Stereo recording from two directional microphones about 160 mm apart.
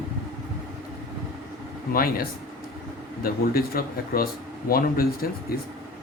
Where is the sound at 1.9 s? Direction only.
65° left (ahead or behind).